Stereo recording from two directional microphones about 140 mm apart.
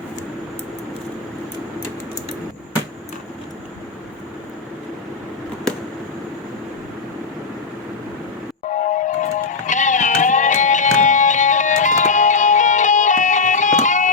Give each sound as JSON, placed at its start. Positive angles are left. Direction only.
{"t": 8.7, "sound": "music", "side_deg": 60}